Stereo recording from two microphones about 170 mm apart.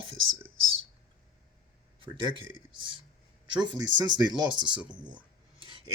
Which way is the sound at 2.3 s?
30° right (ahead or behind).